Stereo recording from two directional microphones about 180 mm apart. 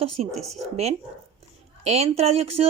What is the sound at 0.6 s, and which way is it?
Speech, 35° right (ahead or behind).